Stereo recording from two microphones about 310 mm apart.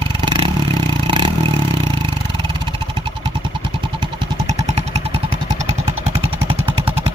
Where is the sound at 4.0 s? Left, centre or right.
Centre.